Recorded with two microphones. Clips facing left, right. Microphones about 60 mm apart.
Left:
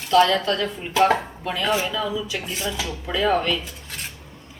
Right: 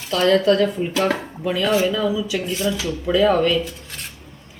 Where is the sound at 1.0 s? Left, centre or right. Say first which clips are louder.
Left 1 dB; centre.